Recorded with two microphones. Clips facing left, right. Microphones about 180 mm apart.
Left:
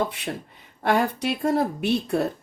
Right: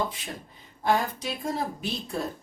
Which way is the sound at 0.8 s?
70° left (ahead or behind).